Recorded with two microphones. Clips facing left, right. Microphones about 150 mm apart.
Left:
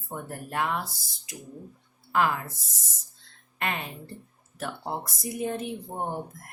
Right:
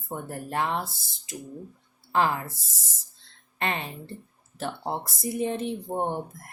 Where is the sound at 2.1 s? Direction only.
30° right (ahead or behind).